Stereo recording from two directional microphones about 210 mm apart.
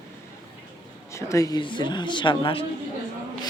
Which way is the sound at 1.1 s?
15° left (ahead or behind).